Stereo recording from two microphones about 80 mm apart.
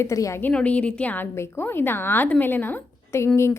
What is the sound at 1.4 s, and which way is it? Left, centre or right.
A woman's voice, left.